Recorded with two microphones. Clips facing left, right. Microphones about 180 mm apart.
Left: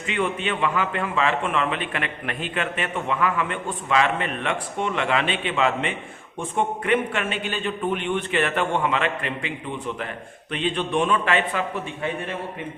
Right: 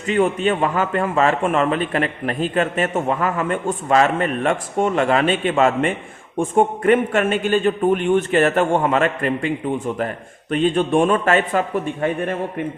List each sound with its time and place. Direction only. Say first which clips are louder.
0.1 s a man's voice: right 8 dB; 40° right (ahead or behind)